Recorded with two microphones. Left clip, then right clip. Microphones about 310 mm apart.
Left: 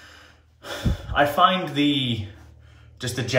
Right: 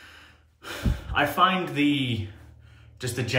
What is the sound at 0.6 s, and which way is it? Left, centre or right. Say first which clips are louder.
Speech: left 3 dB; centre.